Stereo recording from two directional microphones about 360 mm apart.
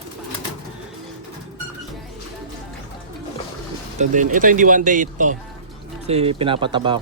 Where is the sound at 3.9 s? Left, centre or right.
Right.